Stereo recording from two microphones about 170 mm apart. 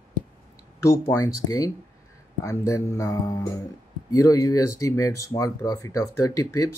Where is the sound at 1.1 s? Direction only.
15° left (ahead or behind).